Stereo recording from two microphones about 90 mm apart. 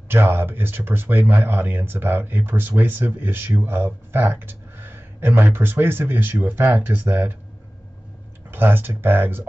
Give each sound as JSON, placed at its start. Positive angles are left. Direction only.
{"t": 0.1, "sound": "speech", "side_deg": -25}
{"t": 8.5, "sound": "speech", "side_deg": -25}